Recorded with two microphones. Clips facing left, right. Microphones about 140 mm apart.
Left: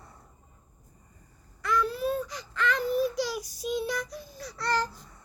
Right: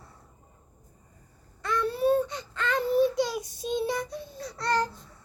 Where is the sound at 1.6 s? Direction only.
25° right (ahead or behind).